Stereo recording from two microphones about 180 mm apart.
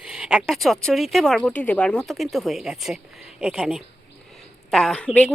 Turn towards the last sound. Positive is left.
turn(degrees=5)  # may be behind; listen again after turning